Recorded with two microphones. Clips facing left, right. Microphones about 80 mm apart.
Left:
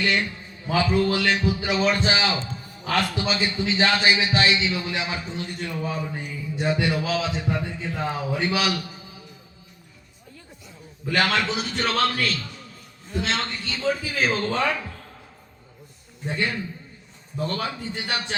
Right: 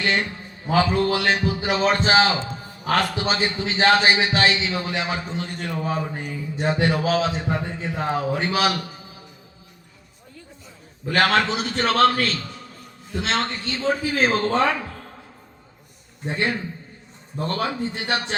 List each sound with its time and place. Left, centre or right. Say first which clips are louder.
0.0 s a sound: right 1 dB; right
1.5 s a man's voice: right 2 dB; right
11.1 s a man's voice: right 3 dB; right
16.2 s a man's voice: right 2 dB; right